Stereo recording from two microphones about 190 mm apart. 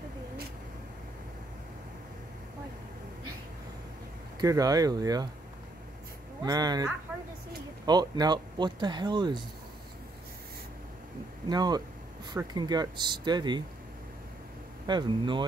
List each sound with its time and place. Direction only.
4.4 s speech: 20° right (ahead or behind)
6.4 s speech: 20° right (ahead or behind)
7.1 s a sound: 10° right (ahead or behind)
7.8 s speech: 20° right (ahead or behind)
11.4 s speech: 20° right (ahead or behind)
14.9 s speech: 25° right (ahead or behind)